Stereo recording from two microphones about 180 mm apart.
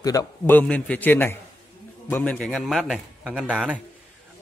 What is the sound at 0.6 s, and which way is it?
A man's voice, 5° left (ahead or behind).